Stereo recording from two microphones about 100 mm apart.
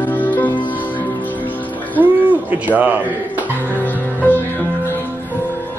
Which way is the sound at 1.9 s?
15° right (ahead or behind).